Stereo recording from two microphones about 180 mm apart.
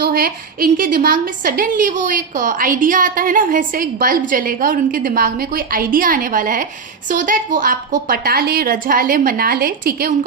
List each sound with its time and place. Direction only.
0.0 s a woman's voice: 55° right (ahead or behind)